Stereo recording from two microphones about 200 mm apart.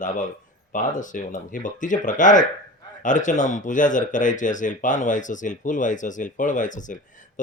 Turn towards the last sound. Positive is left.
turn(degrees=40)  # may be behind; listen again after turning